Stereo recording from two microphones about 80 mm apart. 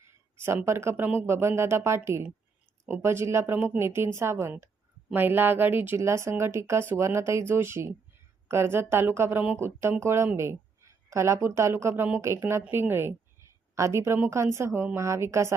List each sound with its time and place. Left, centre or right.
0.3 s speech: right
6.0 s a woman's voice: right